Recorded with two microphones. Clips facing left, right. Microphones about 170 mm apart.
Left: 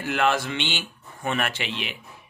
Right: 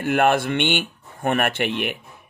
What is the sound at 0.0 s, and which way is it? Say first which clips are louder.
Speech: right 5 dB; 55° right (ahead or behind).